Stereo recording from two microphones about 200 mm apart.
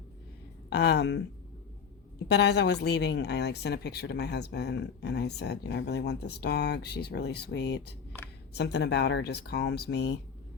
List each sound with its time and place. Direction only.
0.7 s a woman's voice: 55° left (ahead or behind)
2.2 s a woman's voice: 55° left (ahead or behind)